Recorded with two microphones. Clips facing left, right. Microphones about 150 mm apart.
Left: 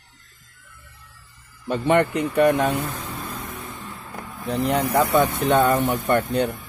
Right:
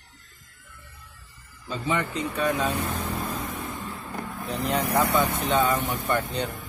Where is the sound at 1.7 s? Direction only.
65° left (ahead or behind).